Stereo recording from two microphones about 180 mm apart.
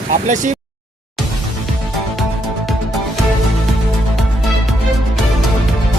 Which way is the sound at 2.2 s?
Centre (ahead or behind).